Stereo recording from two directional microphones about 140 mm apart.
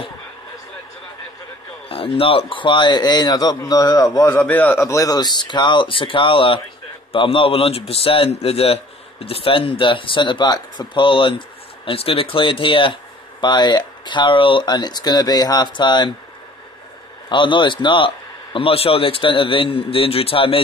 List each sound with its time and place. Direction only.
1.9 s speech: 40° left (ahead or behind)
17.3 s speech: 35° left (ahead or behind)